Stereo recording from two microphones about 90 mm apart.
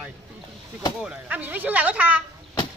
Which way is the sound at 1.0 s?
15° right (ahead or behind).